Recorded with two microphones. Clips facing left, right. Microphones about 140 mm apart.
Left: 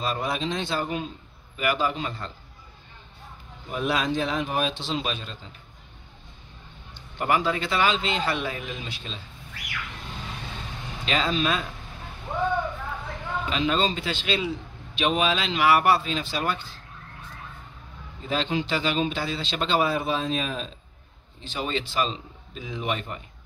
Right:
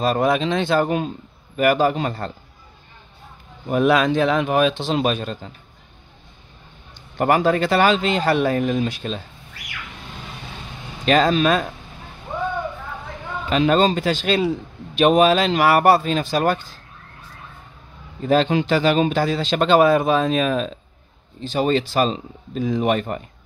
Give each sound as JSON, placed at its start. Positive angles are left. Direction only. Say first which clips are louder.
{"t": 0.0, "sound": "a man's voice", "louder": "right 9 dB", "side_deg": -55}
{"t": 3.6, "sound": "speech", "louder": "right 9 dB", "side_deg": -60}
{"t": 7.2, "sound": "a man's voice", "louder": "right 7 dB", "side_deg": -50}
{"t": 11.1, "sound": "a man's voice", "louder": "right 9 dB", "side_deg": -50}
{"t": 13.5, "sound": "a man's voice", "louder": "right 9 dB", "side_deg": -50}
{"t": 18.2, "sound": "a man's voice", "louder": "right 9 dB", "side_deg": -50}
{"t": 21.5, "sound": "a man's voice", "louder": "right 10 dB", "side_deg": -45}